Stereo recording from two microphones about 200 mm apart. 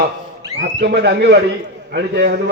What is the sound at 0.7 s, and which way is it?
Speech, 55° right (ahead or behind).